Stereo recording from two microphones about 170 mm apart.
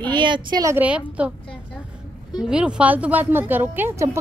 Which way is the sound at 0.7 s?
10° right (ahead or behind).